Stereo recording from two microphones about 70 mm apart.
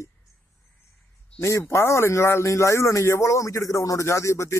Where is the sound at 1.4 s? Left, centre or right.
Left.